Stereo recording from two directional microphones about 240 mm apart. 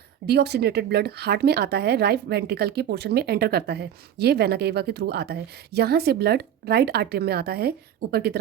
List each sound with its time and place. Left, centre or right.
0.3 s a woman's voice: right